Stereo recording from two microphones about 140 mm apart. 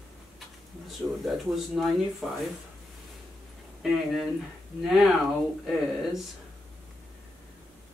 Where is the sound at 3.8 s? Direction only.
Centre (ahead or behind).